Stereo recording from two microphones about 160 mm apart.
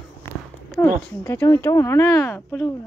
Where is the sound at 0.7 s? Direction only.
15° left (ahead or behind).